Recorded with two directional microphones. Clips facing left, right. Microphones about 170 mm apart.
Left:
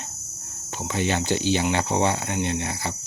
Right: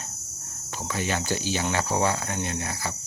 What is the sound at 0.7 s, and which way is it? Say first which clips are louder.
Speech: left 4 dB; 25° left (ahead or behind).